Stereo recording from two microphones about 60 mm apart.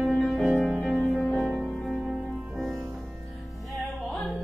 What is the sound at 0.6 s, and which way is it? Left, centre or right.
Music, left.